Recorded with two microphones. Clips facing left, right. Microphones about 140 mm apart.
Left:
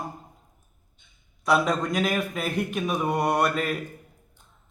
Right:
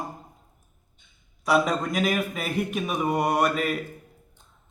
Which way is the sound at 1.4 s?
Centre (ahead or behind).